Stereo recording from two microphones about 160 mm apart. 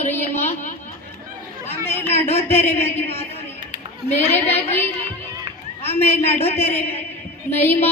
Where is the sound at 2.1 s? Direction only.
40° left (ahead or behind).